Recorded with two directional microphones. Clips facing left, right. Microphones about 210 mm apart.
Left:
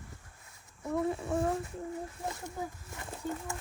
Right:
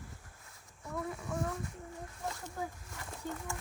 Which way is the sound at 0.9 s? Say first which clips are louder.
Left 7 dB; 25° left (ahead or behind).